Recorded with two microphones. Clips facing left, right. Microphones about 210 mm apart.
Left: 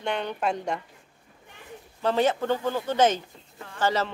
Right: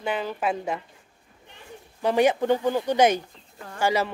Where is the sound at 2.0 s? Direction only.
15° right (ahead or behind).